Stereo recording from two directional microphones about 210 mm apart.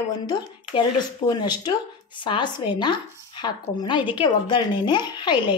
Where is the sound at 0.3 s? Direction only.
20° left (ahead or behind).